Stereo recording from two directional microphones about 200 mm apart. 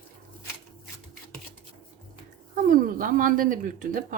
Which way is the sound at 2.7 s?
40° right (ahead or behind).